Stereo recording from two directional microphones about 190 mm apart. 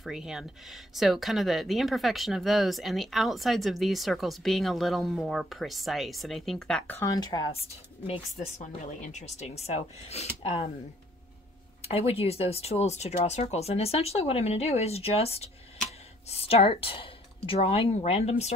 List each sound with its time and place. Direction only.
0.0 s speech: centre (ahead or behind)
7.0 s speech: 20° left (ahead or behind)
8.4 s speech: 35° left (ahead or behind)
11.8 s speech: 30° left (ahead or behind)